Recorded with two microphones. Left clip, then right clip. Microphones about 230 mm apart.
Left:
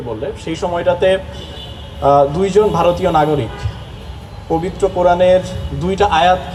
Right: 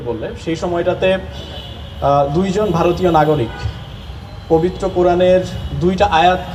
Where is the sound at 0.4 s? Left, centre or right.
Left.